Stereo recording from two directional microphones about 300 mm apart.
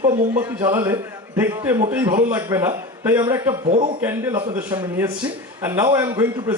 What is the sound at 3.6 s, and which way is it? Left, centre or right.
Speech, centre.